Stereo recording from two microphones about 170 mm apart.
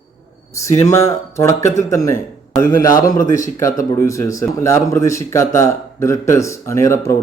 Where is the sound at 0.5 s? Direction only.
20° left (ahead or behind).